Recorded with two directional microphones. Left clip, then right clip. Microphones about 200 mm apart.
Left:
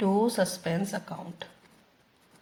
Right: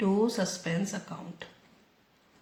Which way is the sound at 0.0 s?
20° left (ahead or behind).